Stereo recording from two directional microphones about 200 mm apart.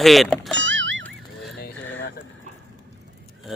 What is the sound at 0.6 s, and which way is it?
Music, 65° right (ahead or behind).